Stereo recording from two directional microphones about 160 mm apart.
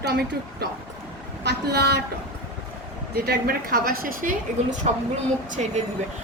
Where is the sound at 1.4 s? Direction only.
90° right.